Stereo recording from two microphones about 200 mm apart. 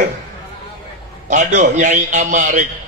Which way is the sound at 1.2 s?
40° right (ahead or behind).